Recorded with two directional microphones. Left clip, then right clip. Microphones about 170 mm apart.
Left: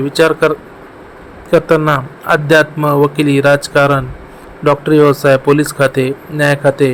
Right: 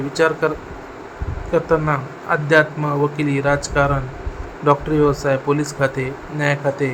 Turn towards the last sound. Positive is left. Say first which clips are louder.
# left 8 dB
turn(degrees=35)  # may be behind; listen again after turning